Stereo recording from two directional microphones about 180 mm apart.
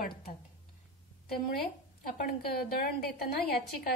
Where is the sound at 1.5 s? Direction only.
55° left (ahead or behind).